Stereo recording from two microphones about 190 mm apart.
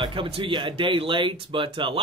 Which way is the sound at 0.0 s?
25° right (ahead or behind).